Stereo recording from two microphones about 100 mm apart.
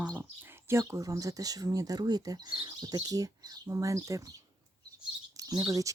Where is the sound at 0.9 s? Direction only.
35° right (ahead or behind).